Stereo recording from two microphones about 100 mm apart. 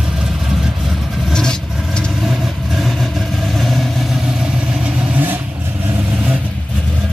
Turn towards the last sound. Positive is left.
turn(degrees=-15)  # may be behind; listen again after turning